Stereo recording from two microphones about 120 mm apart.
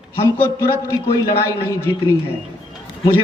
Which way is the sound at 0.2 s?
20° left (ahead or behind).